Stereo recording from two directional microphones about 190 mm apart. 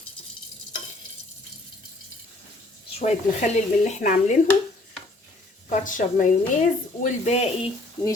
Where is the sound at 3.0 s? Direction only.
40° left (ahead or behind).